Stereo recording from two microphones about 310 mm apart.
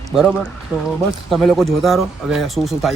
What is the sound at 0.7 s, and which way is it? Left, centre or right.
Speech, centre.